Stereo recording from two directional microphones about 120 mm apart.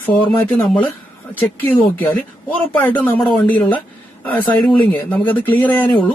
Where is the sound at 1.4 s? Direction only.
15° left (ahead or behind).